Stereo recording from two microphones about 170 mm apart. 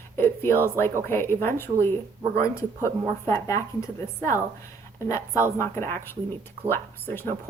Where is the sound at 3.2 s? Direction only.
15° left (ahead or behind).